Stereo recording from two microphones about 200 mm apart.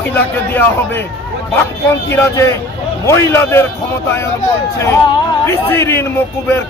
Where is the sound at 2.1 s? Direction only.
15° left (ahead or behind).